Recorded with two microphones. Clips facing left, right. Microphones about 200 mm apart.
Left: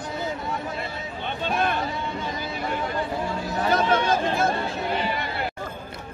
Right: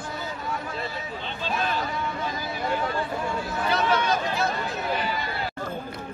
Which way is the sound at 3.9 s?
25° left (ahead or behind).